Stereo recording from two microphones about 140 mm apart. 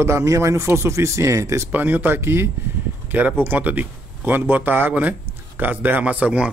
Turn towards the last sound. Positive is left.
turn(degrees=-10)  # may be behind; listen again after turning